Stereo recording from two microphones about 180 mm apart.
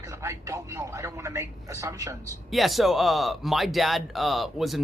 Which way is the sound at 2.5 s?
Centre (ahead or behind).